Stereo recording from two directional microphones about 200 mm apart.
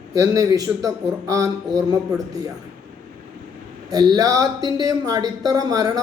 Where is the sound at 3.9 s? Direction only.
20° right (ahead or behind).